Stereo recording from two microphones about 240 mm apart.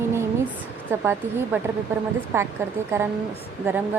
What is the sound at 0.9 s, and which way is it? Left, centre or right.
Speech, centre.